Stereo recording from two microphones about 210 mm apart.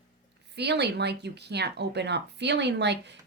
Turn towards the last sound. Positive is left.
turn(degrees=-55)  # may be behind; listen again after turning